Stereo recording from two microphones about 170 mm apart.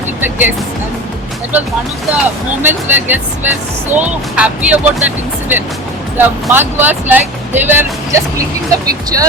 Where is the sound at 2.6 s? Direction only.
10° right (ahead or behind).